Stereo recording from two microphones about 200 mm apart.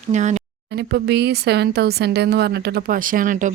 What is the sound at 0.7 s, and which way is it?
Speech, 55° right (ahead or behind).